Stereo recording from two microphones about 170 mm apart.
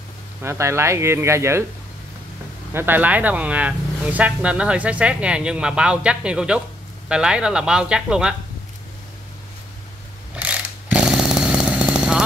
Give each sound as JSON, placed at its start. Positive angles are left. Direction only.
{"t": 0.4, "sound": "speech", "side_deg": -15}
{"t": 2.7, "sound": "speech", "side_deg": -10}
{"t": 10.3, "sound": "chainsaw", "side_deg": -5}